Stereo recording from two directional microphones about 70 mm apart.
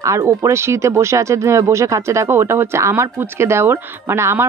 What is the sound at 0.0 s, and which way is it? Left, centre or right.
Speech, right.